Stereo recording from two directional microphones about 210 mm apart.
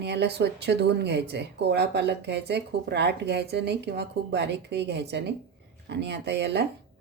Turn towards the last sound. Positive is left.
turn(degrees=-55)  # may be behind; listen again after turning